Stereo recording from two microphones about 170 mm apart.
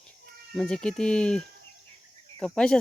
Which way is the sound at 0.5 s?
5° left (ahead or behind).